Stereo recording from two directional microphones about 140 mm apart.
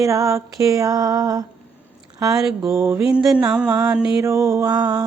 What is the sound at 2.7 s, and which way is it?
Mantra, 20° right (ahead or behind).